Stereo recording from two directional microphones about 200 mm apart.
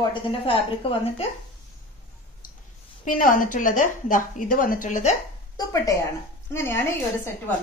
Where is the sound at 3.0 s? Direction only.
40° left (ahead or behind).